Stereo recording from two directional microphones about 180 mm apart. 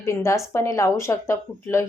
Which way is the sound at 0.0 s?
15° left (ahead or behind).